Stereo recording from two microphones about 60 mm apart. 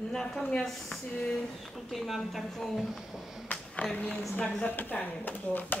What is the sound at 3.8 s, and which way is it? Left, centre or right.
Speech, left.